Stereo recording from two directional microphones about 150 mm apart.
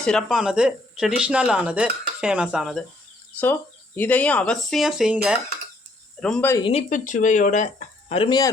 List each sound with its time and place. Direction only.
0.0 s speech: 5° left (ahead or behind)
3.4 s speech: 10° left (ahead or behind); by 5.4 s 5° right (ahead or behind)
6.1 s speech: 5° left (ahead or behind)
6.6 s speech: 40° left (ahead or behind)
6.9 s speech: 60° left (ahead or behind)
8.1 s speech: 35° left (ahead or behind)